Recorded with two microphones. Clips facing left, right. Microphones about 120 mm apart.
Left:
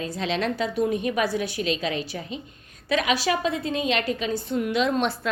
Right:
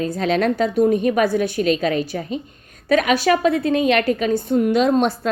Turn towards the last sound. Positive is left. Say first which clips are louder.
# right 6 dB
turn(degrees=-40)  # may be behind; listen again after turning